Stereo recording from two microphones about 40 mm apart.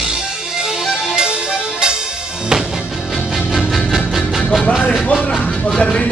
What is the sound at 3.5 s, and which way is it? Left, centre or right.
Music, centre.